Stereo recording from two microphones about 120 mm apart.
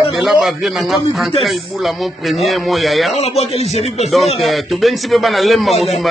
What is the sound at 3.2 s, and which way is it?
Speech, 60° left (ahead or behind).